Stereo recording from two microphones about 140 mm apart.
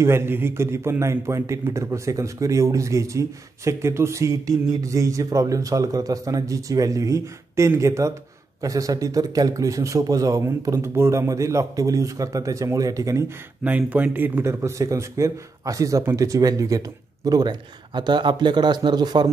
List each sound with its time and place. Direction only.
0.0 s a man's voice: 15° right (ahead or behind)
13.7 s a man's voice: 10° right (ahead or behind); by 19.2 s 30° right (ahead or behind)